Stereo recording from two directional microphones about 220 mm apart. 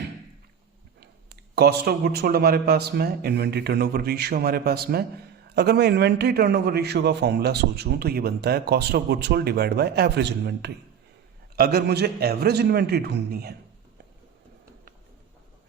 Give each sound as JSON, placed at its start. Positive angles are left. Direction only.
{"t": 1.5, "sound": "a man's voice", "side_deg": -45}